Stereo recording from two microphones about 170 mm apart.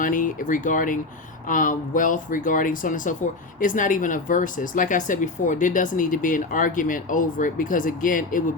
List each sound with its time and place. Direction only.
0.0 s speech: 50° left (ahead or behind)